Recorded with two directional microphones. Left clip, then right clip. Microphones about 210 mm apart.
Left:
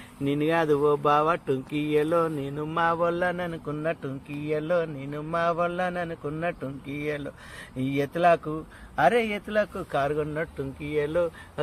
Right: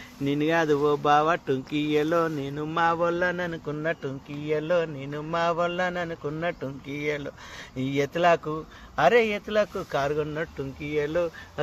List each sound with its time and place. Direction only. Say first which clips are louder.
0.3 s speech: even; 15° right (ahead or behind)